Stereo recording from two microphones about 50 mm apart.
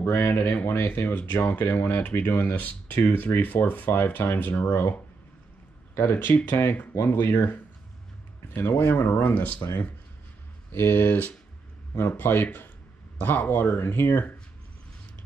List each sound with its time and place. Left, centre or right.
0.1 s speech: left
5.9 s speech: left
9.6 s speech: left
10.7 s speech: left